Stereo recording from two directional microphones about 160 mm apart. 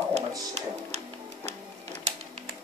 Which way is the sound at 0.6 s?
45° right (ahead or behind).